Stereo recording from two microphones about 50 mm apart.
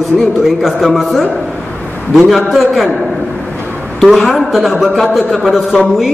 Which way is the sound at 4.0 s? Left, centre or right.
Centre.